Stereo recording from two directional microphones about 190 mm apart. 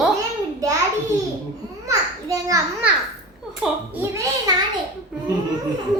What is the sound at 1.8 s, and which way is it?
Speech, 15° right (ahead or behind).